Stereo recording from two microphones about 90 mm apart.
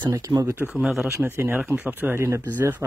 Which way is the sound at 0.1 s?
35° right (ahead or behind).